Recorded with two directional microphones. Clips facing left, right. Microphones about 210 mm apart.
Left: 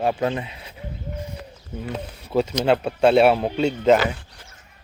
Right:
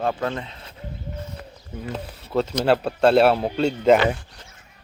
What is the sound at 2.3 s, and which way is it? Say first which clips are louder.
Speech: left 1 dB; 5° left (ahead or behind).